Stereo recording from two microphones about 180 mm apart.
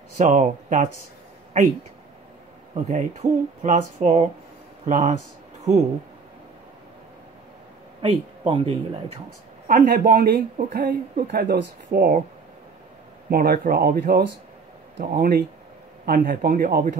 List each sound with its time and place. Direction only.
0.2 s speech: 45° right (ahead or behind)
8.0 s speech: 30° right (ahead or behind)
9.7 s speech: 50° right (ahead or behind)
13.3 s speech: 55° right (ahead or behind)
16.1 s speech: 50° right (ahead or behind)